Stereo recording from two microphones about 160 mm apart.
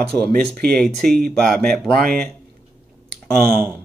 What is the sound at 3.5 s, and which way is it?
Speech, 15° right (ahead or behind).